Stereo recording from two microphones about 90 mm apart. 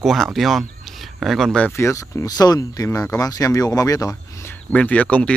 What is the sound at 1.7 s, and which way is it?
Speech, 30° left (ahead or behind).